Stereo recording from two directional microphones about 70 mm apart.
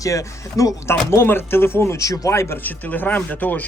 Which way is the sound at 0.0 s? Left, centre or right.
Left.